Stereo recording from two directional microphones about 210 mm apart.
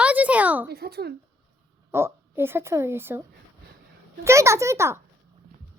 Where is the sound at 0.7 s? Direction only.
50° right (ahead or behind).